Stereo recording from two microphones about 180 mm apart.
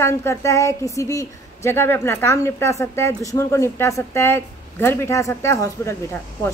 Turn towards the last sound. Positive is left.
turn(degrees=15)  # may be behind; listen again after turning